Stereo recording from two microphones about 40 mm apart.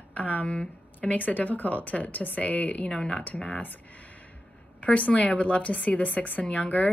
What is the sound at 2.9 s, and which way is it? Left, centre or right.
Speech, left.